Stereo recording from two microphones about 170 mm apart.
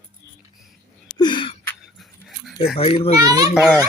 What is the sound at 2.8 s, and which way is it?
Speech, 35° left (ahead or behind).